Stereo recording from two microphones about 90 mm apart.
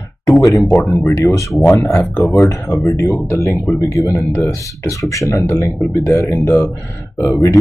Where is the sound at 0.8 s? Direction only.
20° left (ahead or behind).